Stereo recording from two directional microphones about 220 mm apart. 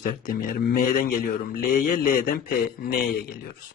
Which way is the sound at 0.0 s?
40° left (ahead or behind).